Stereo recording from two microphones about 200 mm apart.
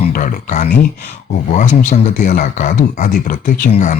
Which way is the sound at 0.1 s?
35° left (ahead or behind).